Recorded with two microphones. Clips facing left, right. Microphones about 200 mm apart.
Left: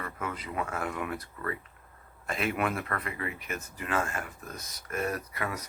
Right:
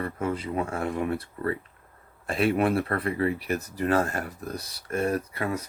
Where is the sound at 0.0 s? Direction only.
30° right (ahead or behind).